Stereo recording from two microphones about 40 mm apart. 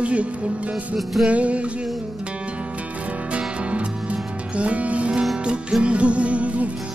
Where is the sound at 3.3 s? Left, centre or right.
Right.